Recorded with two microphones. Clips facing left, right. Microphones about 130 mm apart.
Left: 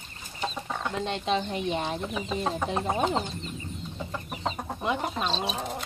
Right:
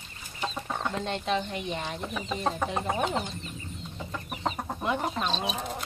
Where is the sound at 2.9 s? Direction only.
30° left (ahead or behind).